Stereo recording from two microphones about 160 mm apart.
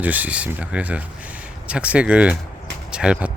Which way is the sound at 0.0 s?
10° right (ahead or behind).